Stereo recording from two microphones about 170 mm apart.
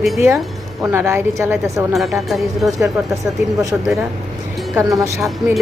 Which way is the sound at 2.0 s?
Centre (ahead or behind).